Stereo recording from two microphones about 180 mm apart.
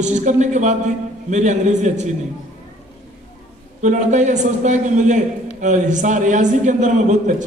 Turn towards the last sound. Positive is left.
turn(degrees=-45)  # may be behind; listen again after turning